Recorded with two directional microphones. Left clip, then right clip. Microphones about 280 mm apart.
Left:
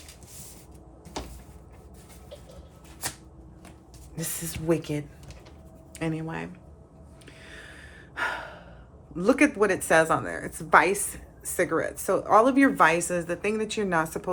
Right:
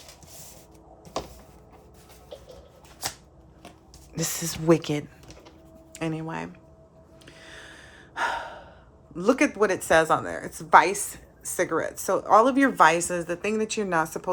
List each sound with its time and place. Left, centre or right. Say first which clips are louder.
4.1 s speech: right 6 dB; right
7.3 s gasp: right 1 dB; centre
9.1 s speech: even; centre